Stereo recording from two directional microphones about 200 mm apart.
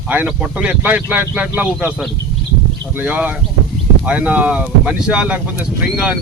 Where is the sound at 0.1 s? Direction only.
10° right (ahead or behind).